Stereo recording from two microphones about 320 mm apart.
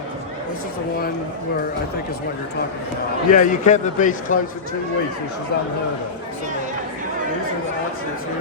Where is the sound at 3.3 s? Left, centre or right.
Left.